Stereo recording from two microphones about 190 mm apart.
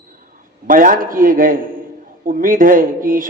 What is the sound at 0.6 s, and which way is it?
A man's voice, 45° right (ahead or behind).